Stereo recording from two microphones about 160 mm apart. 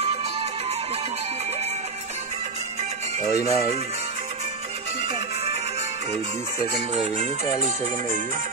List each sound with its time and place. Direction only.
3.3 s speech: 20° left (ahead or behind)
7.2 s speech: 45° right (ahead or behind)